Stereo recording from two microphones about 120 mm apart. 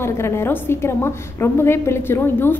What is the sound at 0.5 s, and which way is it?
A woman's voice, 20° left (ahead or behind).